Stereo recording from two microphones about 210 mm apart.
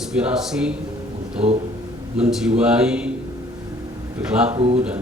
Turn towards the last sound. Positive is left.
turn(degrees=-25)  # may be behind; listen again after turning